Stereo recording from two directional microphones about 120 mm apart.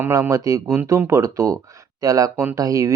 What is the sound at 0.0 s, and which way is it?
Speech, 25° right (ahead or behind).